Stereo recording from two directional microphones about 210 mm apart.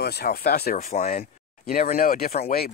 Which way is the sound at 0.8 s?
35° left (ahead or behind).